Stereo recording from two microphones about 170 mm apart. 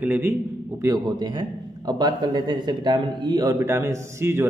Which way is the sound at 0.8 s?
25° right (ahead or behind).